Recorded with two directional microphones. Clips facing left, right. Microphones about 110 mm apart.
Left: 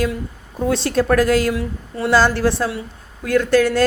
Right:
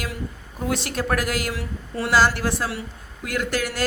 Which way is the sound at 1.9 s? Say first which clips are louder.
Left 4 dB; 25° left (ahead or behind).